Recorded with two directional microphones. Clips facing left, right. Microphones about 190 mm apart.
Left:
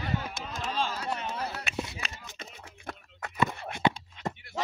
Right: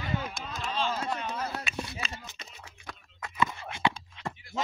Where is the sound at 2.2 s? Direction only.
50° left (ahead or behind).